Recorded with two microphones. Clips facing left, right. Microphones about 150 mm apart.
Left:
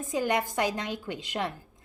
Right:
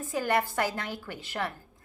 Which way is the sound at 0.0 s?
20° left (ahead or behind).